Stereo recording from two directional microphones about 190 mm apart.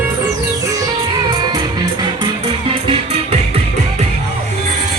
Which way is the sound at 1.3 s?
20° right (ahead or behind).